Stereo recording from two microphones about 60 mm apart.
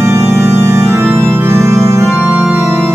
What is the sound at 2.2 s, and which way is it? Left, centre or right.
Organ, right.